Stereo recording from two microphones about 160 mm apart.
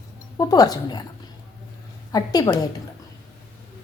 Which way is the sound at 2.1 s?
25° left (ahead or behind).